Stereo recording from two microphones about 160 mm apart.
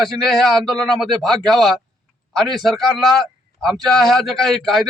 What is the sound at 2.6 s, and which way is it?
A man's voice, centre (ahead or behind).